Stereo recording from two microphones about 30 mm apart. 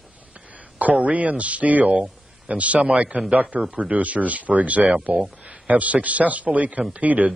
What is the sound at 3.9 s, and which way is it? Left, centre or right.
A man's voice, right.